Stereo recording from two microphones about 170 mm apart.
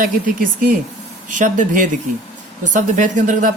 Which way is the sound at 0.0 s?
55° right (ahead or behind).